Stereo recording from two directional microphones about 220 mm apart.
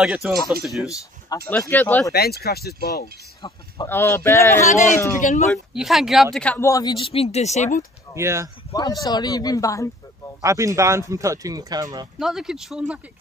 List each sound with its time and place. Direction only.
0.0 s speech: 5° right (ahead or behind)
1.3 s speech: 10° left (ahead or behind)
2.1 s speech: 45° left (ahead or behind)
3.4 s speech: 15° left (ahead or behind)
4.6 s speech: 35° left (ahead or behind)
4.9 s speech: 15° left (ahead or behind)
5.5 s speech: centre (ahead or behind); by 7.8 s 30° left (ahead or behind)
8.1 s speech: 10° right (ahead or behind)
8.7 s speech: 15° left (ahead or behind)
10.4 s speech: 15° right (ahead or behind)
12.2 s speech: centre (ahead or behind)